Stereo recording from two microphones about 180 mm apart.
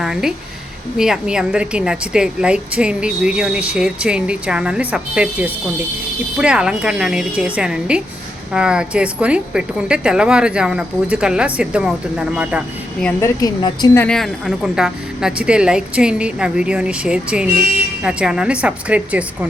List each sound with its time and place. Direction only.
0.0 s a woman's voice: 5° right (ahead or behind)
13.1 s a woman's voice: 15° left (ahead or behind)
13.9 s a woman's voice: 5° left (ahead or behind)